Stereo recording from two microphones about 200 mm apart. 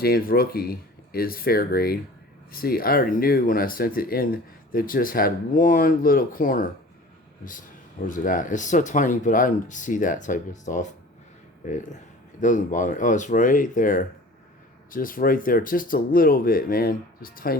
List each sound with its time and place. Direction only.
0.0 s speech: 50° left (ahead or behind)
8.0 s speech: 40° left (ahead or behind)